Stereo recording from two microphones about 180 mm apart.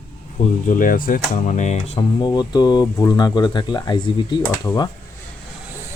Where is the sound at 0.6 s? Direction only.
50° left (ahead or behind).